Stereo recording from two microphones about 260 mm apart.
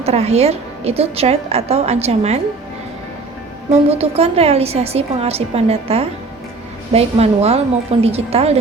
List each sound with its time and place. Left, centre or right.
0.0 s a woman's voice: right
3.7 s a woman's voice: right